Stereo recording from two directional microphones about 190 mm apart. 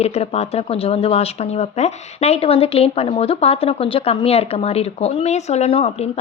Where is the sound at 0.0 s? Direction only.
35° left (ahead or behind).